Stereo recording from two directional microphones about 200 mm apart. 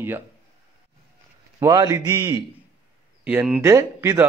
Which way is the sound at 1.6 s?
15° right (ahead or behind).